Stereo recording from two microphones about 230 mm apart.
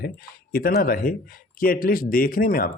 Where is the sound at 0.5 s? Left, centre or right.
Left.